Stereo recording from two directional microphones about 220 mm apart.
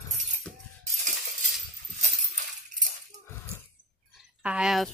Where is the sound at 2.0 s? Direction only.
35° right (ahead or behind).